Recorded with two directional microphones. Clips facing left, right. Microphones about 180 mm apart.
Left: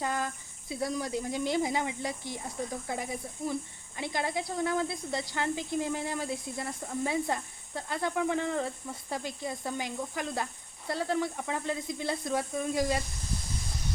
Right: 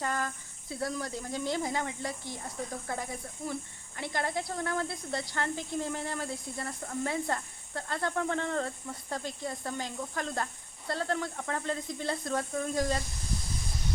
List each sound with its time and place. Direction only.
0.0 s speech: 15° left (ahead or behind)